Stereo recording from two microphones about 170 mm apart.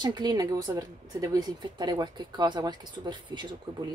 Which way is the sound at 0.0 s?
25° right (ahead or behind).